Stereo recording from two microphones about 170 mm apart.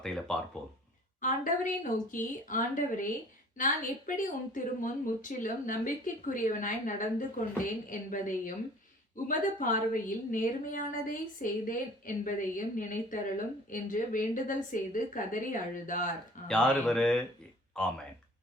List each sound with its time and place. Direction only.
0.0 s a sound: 5° left (ahead or behind)
1.2 s a woman's voice: 50° left (ahead or behind)
16.5 s speech: 5° left (ahead or behind)